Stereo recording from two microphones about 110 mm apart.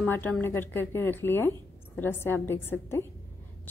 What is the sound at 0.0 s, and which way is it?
A woman's voice, 20° left (ahead or behind).